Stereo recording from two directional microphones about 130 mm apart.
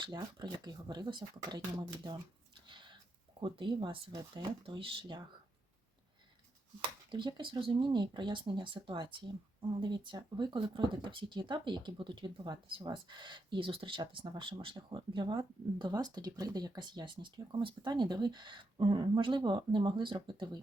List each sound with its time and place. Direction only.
0.0 s speech: 35° right (ahead or behind)
2.6 s a sound: 40° right (ahead or behind)
3.4 s speech: 40° right (ahead or behind)
7.1 s speech: 35° right (ahead or behind)